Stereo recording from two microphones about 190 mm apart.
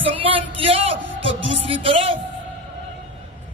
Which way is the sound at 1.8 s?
30° right (ahead or behind).